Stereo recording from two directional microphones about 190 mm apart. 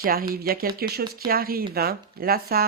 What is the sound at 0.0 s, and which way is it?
Speech, 50° right (ahead or behind).